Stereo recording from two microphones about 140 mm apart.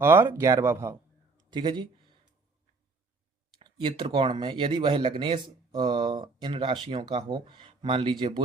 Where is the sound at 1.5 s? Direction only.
30° right (ahead or behind).